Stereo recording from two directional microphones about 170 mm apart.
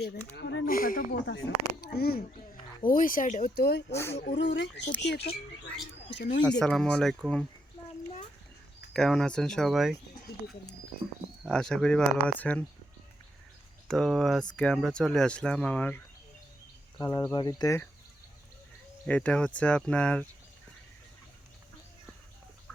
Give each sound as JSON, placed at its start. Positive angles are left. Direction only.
{"t": 0.3, "sound": "speech", "side_deg": 85}
{"t": 0.7, "sound": "speech", "side_deg": 55}
{"t": 2.8, "sound": "speech", "side_deg": 55}
{"t": 3.9, "sound": "speech", "side_deg": 15}
{"t": 4.2, "sound": "speech", "side_deg": 90}
{"t": 5.0, "sound": "speech", "side_deg": 80}
{"t": 6.6, "sound": "speech", "side_deg": 5}
{"t": 8.9, "sound": "speech", "side_deg": 0}
{"t": 11.4, "sound": "speech", "side_deg": 5}
{"t": 13.8, "sound": "speech", "side_deg": 0}
{"t": 17.0, "sound": "speech", "side_deg": 20}
{"t": 19.0, "sound": "speech", "side_deg": 10}